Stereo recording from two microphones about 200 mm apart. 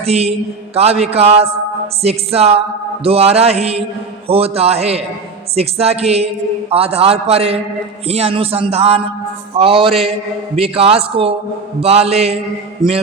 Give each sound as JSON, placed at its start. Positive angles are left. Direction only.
{"t": 0.0, "sound": "a man's voice", "side_deg": -30}